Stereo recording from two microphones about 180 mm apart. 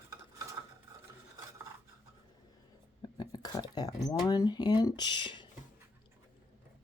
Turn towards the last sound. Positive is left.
turn(degrees=25)  # may be behind; listen again after turning